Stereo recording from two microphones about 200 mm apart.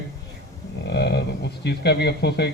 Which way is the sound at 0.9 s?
55° left (ahead or behind).